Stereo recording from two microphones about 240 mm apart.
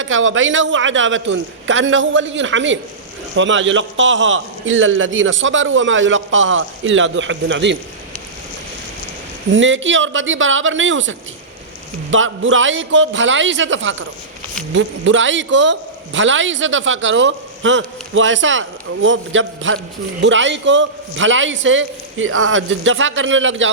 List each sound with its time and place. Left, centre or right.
0.0 s a man's voice: right
9.5 s a man's voice: right
12.1 s a man's voice: right